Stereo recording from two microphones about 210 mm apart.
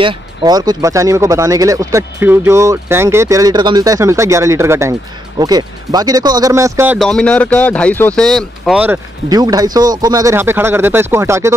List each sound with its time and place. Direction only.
0.0 s speech: 20° right (ahead or behind)
7.0 s speech: 5° left (ahead or behind)
9.3 s speech: 20° right (ahead or behind)